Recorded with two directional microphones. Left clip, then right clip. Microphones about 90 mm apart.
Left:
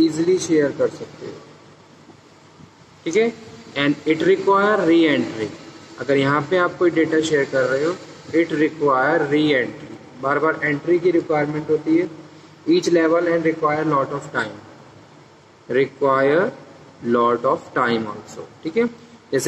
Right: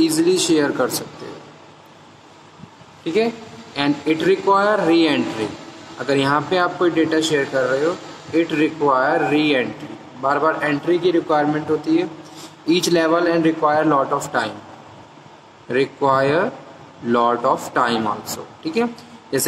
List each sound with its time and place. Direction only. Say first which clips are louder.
0.0 s speech: right 1 dB; 70° right (ahead or behind)
3.0 s speech: left 1 dB; 35° right (ahead or behind)
15.7 s speech: even; 40° right (ahead or behind)